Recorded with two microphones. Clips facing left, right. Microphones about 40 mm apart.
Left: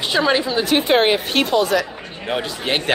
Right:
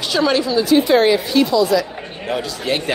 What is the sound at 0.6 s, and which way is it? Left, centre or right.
Speech, left.